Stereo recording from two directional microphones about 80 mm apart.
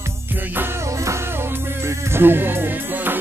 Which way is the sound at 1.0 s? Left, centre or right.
Right.